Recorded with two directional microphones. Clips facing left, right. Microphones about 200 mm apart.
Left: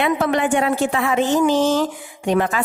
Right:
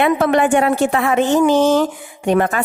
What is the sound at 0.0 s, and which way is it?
A woman's voice, 55° right (ahead or behind).